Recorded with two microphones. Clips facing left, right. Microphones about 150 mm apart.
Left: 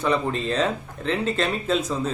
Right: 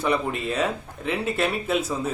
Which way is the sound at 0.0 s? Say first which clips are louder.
Left 1 dB; 10° right (ahead or behind).